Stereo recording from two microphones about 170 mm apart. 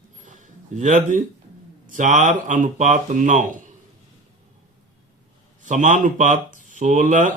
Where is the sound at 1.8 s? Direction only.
50° right (ahead or behind).